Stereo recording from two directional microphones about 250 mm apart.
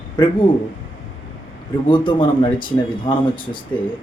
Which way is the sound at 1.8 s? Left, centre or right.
Centre.